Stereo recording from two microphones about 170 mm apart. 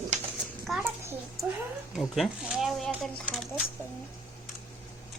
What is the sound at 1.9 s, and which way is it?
Speech, centre (ahead or behind).